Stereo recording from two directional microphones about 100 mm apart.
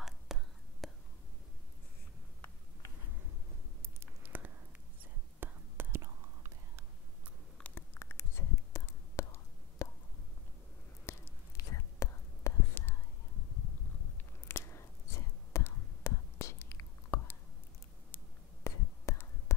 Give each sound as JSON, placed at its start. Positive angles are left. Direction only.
{"t": 0.0, "sound": "whispering", "side_deg": 0}
{"t": 4.0, "sound": "a sound", "side_deg": -20}
{"t": 5.4, "sound": "whispering", "side_deg": -20}
{"t": 7.7, "sound": "whispering", "side_deg": 20}
{"t": 11.1, "sound": "whispering", "side_deg": 30}
{"t": 14.5, "sound": "whispering", "side_deg": 30}